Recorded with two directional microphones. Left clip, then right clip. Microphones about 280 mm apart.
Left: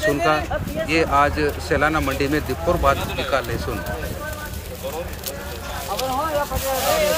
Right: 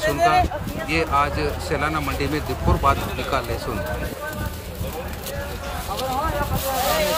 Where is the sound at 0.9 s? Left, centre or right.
Centre.